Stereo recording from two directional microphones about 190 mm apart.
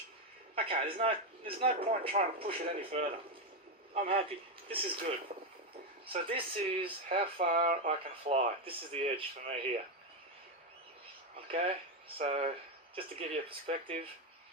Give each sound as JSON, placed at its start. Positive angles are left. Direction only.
{"t": 0.5, "sound": "speech", "side_deg": -30}
{"t": 7.3, "sound": "speech", "side_deg": -45}
{"t": 7.9, "sound": "speech", "side_deg": -30}
{"t": 11.3, "sound": "speech", "side_deg": -30}